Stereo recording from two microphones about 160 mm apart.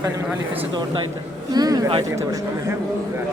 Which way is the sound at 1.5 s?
25° right (ahead or behind).